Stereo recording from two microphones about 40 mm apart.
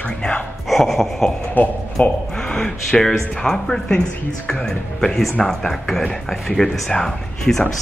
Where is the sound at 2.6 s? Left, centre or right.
Centre.